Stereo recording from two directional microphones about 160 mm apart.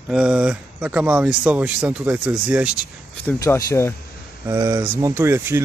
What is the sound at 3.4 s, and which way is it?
Speech, 20° left (ahead or behind).